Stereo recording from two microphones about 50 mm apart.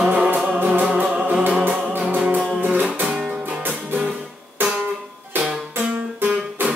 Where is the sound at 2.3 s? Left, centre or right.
Right.